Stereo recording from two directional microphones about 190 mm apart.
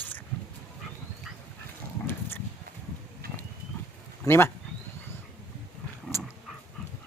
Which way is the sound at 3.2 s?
50° right (ahead or behind).